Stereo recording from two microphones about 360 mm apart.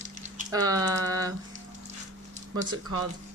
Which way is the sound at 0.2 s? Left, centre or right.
Centre.